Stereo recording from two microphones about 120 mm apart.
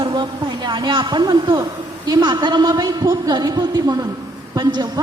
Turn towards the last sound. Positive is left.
turn(degrees=-35)  # may be behind; listen again after turning